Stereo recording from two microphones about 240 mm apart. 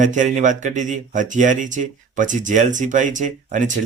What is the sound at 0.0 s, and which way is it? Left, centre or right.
Speech, right.